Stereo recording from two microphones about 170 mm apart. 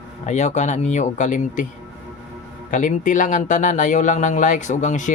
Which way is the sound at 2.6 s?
50° left (ahead or behind).